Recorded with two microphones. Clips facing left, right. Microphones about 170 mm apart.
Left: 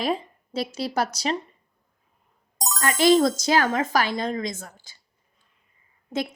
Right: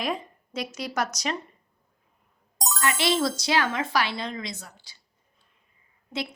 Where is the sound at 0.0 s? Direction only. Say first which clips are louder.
Left 4 dB; 30° left (ahead or behind).